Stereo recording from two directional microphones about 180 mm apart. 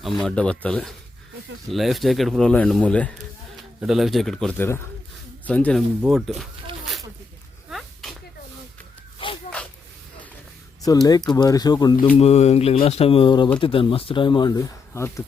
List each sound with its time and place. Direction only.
0.0 s speech: 5° left (ahead or behind)
7.7 s whip: centre (ahead or behind)
9.1 s a sound: 30° left (ahead or behind)
11.0 s speech: 20° left (ahead or behind)
12.1 s speech: 35° left (ahead or behind); by 15.2 s 15° left (ahead or behind)